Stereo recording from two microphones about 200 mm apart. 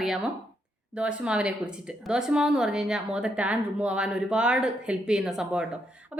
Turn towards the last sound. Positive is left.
turn(degrees=-5)  # may be behind; listen again after turning